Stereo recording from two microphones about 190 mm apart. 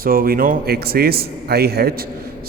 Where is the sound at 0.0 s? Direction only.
50° right (ahead or behind).